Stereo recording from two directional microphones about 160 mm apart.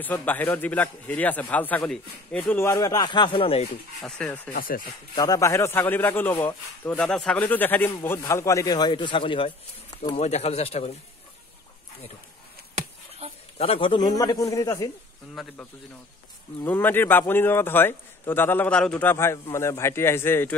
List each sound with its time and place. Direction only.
0.0 s a man's voice: 10° left (ahead or behind)
2.5 s a man's voice: 15° left (ahead or behind); by 3.6 s 35° left (ahead or behind)
4.0 s a man's voice: 10° left (ahead or behind)
4.5 s speech: 60° left (ahead or behind)
5.1 s a man's voice: 20° left (ahead or behind); by 10.9 s 40° left (ahead or behind)
13.6 s a man's voice: 35° left (ahead or behind)
15.4 s speech: centre (ahead or behind)
16.6 s a man's voice: 10° left (ahead or behind)